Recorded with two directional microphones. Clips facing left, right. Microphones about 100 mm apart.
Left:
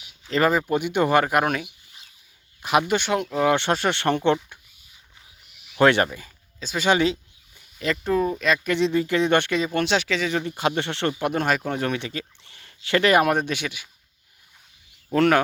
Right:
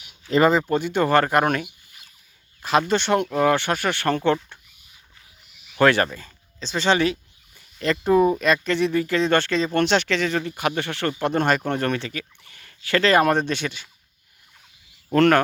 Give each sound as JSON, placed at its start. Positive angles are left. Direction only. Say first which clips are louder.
{"t": 0.3, "sound": "speech", "louder": "right 3 dB", "side_deg": -5}
{"t": 0.5, "sound": "speech", "louder": "right 1 dB", "side_deg": 15}
{"t": 2.0, "sound": "a sound", "louder": "even", "side_deg": -50}
{"t": 2.6, "sound": "speech", "louder": "right 1 dB", "side_deg": 15}
{"t": 3.5, "sound": "speech", "louder": "even", "side_deg": 25}
{"t": 5.7, "sound": "speech", "louder": "even", "side_deg": 20}
{"t": 6.1, "sound": "a sound", "louder": "even", "side_deg": 10}
{"t": 8.0, "sound": "speech", "louder": "right 6 dB", "side_deg": -10}
{"t": 8.6, "sound": "speech", "louder": "even", "side_deg": 20}
{"t": 11.1, "sound": "speech", "louder": "right 4 dB", "side_deg": 5}
{"t": 12.1, "sound": "speech", "louder": "left 1 dB", "side_deg": 25}
{"t": 15.1, "sound": "speech", "louder": "right 2 dB", "side_deg": 10}